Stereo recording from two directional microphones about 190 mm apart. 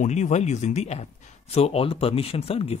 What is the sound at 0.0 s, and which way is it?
Speech, 40° left (ahead or behind).